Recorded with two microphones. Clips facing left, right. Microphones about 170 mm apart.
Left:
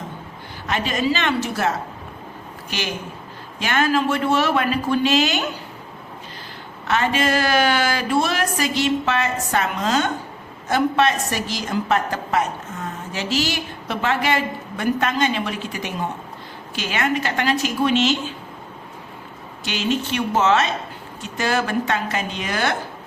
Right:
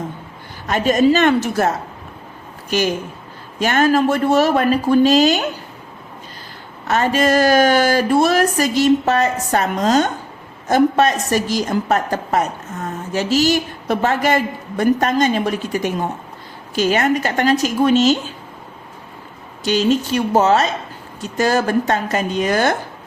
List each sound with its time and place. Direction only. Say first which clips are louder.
0.7 s a man's voice: right 8 dB; 45° right (ahead or behind)
6.8 s a man's voice: right 4 dB; 40° right (ahead or behind)
19.6 s a man's voice: right 7 dB; 40° right (ahead or behind)